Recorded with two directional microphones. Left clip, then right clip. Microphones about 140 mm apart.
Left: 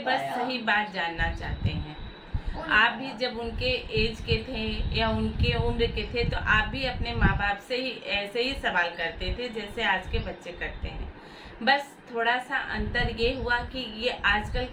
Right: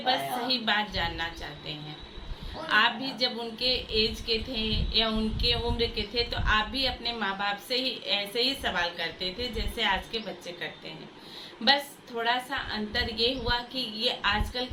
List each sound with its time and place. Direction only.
0.0 s speech: 5° left (ahead or behind)
2.6 s a woman's voice: 5° left (ahead or behind)
12.2 s speech: 5° left (ahead or behind)